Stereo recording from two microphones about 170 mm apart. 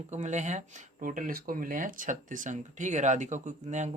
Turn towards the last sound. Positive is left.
turn(degrees=-45)  # may be behind; listen again after turning